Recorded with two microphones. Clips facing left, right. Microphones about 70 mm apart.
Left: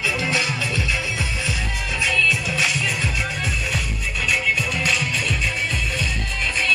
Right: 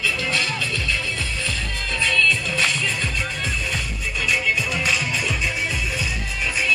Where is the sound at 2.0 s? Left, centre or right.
Centre.